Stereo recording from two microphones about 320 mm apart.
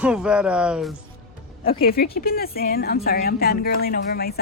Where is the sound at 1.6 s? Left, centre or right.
Left.